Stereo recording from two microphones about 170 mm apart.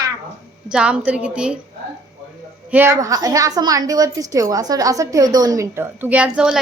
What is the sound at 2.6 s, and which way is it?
A woman's voice, 10° right (ahead or behind).